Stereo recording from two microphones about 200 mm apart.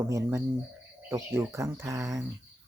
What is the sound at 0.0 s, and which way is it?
Speech, 15° right (ahead or behind).